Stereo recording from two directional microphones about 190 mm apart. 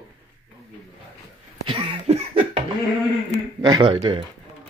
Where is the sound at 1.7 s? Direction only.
30° right (ahead or behind).